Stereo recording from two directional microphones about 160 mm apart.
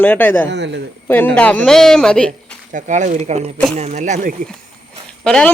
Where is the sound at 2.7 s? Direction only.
50° right (ahead or behind).